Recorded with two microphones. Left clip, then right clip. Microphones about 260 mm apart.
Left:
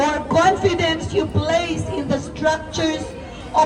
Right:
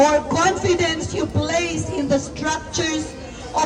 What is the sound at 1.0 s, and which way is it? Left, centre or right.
Music, left.